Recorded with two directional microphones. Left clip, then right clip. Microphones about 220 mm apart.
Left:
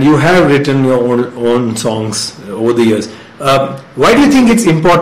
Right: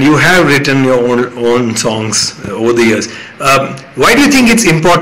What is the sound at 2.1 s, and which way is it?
Beatboxing, 15° right (ahead or behind).